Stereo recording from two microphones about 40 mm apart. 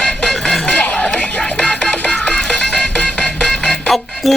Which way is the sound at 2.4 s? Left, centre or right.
Centre.